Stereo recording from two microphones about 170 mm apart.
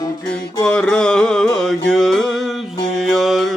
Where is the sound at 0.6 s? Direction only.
5° left (ahead or behind).